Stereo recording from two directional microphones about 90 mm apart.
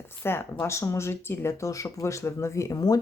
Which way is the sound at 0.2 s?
25° left (ahead or behind).